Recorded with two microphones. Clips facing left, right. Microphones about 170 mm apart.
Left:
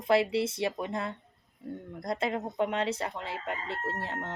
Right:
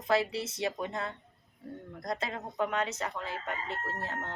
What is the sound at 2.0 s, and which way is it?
Speech, 25° left (ahead or behind).